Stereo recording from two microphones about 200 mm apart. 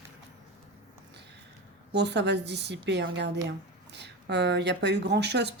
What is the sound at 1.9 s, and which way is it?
Speech, 60° right (ahead or behind).